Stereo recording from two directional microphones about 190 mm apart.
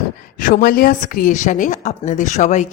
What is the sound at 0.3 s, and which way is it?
A woman's voice, 45° left (ahead or behind).